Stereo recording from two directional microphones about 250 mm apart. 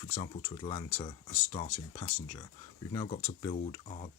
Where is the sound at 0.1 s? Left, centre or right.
Centre.